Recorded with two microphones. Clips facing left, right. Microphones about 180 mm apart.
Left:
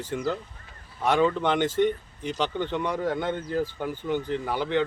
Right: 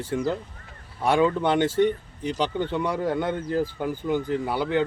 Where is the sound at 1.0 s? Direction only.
10° right (ahead or behind).